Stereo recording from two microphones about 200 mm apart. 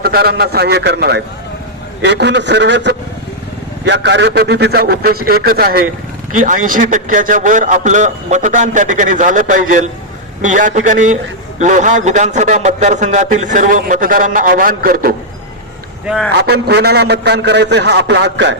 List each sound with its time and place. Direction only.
0.0 s a man's voice: 50° right (ahead or behind)
16.0 s speech: centre (ahead or behind)
16.3 s a man's voice: 55° right (ahead or behind)